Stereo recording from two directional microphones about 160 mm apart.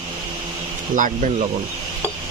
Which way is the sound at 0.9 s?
50° right (ahead or behind).